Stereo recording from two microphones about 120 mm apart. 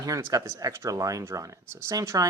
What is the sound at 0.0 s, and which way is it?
Speech, 25° right (ahead or behind).